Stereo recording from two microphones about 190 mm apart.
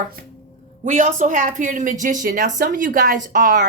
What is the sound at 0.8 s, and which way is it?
A woman's voice, 40° right (ahead or behind).